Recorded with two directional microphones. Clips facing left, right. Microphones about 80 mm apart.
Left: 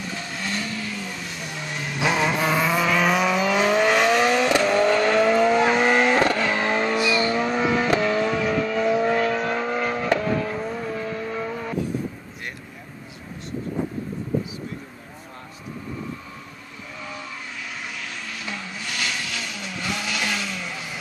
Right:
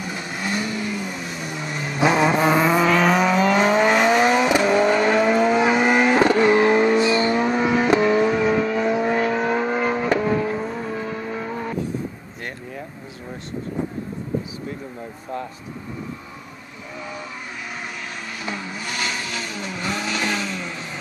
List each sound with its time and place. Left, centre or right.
0.0 s vehicle: centre
6.2 s vehicle: right
7.0 s vehicle: right
7.5 s vehicle: centre
18.4 s vehicle: centre